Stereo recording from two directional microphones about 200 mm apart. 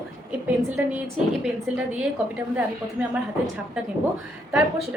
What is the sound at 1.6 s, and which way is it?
A woman's voice, 10° right (ahead or behind).